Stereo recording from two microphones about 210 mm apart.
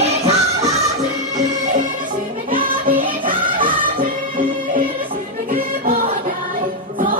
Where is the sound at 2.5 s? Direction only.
40° right (ahead or behind).